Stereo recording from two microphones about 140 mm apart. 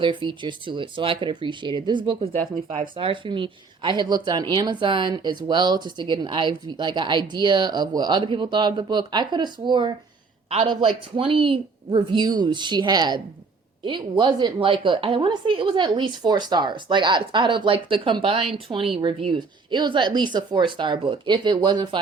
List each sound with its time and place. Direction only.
0.0 s a woman's voice: 35° right (ahead or behind)